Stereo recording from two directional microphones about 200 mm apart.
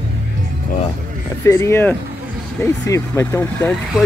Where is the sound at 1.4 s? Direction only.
15° left (ahead or behind).